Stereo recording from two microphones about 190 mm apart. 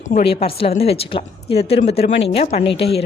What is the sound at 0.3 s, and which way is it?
Speech, 30° left (ahead or behind).